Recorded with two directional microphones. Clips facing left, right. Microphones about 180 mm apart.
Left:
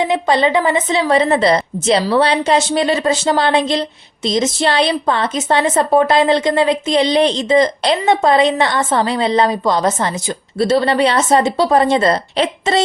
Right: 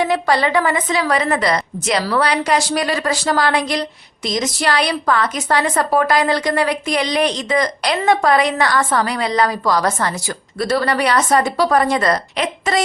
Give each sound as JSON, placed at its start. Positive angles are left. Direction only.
{"t": 0.0, "sound": "a woman's voice", "side_deg": 20}